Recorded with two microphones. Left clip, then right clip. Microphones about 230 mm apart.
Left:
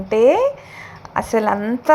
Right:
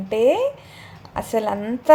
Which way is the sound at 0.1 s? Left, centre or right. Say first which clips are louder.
Left 4 dB; centre.